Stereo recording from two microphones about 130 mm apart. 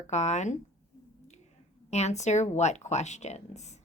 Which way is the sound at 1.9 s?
60° left (ahead or behind).